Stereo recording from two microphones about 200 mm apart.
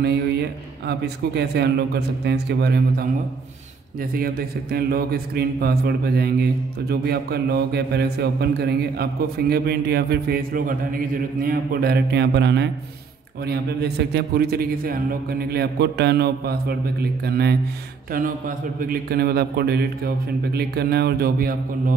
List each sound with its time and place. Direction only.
0.0 s a man's voice: 55° right (ahead or behind)
18.8 s a man's voice: 45° right (ahead or behind)